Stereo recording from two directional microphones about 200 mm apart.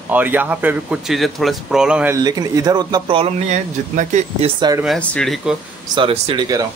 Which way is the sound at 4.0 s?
35° right (ahead or behind).